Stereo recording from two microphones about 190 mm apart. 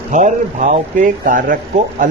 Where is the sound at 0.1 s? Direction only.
40° right (ahead or behind).